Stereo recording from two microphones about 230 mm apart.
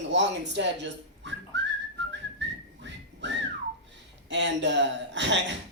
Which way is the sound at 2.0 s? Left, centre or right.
Right.